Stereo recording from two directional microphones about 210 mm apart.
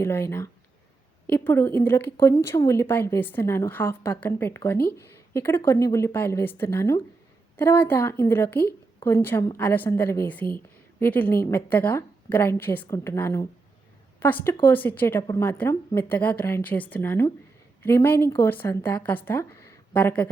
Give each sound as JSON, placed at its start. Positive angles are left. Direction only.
{"t": 0.0, "sound": "a woman's voice", "side_deg": 10}
{"t": 4.8, "sound": "speech", "side_deg": 45}
{"t": 5.3, "sound": "a woman's voice", "side_deg": 10}